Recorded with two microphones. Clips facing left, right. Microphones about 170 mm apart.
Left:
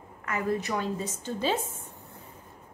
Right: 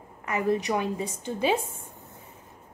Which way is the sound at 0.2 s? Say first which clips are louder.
Right 3 dB; 20° right (ahead or behind).